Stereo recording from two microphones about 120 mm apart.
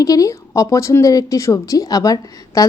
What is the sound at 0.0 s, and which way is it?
A woman's voice, 30° left (ahead or behind).